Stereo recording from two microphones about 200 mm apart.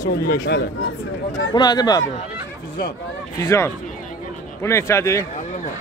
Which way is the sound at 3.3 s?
15° left (ahead or behind).